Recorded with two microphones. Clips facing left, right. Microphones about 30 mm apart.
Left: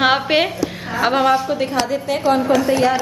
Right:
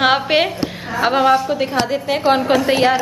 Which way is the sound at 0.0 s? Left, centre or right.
Centre.